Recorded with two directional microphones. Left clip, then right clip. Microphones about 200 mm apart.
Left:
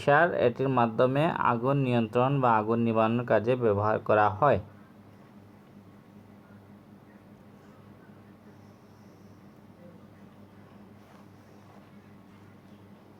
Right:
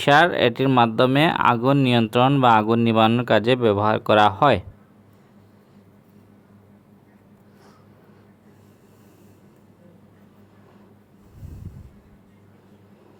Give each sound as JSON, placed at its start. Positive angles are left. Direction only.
{"t": 0.0, "sound": "speech", "side_deg": -60}